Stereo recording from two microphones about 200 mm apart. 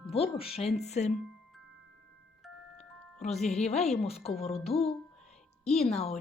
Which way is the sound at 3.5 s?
35° left (ahead or behind).